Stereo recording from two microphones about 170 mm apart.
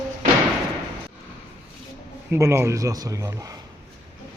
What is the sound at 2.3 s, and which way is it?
Speech, 15° right (ahead or behind).